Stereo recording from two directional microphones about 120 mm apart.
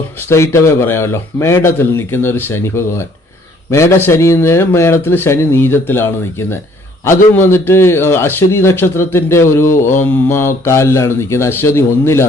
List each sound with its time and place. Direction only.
0.3 s a man's voice: 20° left (ahead or behind)